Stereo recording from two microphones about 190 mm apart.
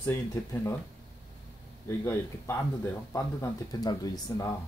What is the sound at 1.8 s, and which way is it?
Speech, 15° left (ahead or behind).